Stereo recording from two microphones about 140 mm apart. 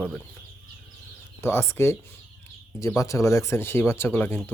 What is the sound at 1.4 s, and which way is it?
Speech, 20° left (ahead or behind).